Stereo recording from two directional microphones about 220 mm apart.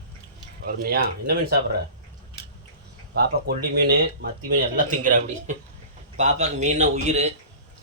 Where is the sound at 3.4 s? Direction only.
45° right (ahead or behind); by 7.3 s 30° right (ahead or behind).